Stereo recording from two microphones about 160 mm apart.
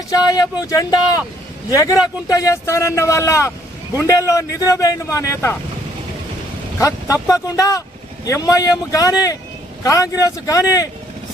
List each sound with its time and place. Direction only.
0.1 s speech: 25° left (ahead or behind)
6.7 s speech: 20° left (ahead or behind)